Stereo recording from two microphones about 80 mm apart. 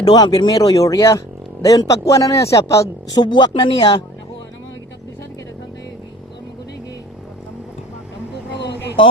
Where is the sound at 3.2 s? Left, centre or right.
Left.